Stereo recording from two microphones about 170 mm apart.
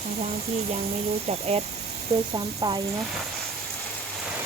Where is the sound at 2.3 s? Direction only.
25° right (ahead or behind).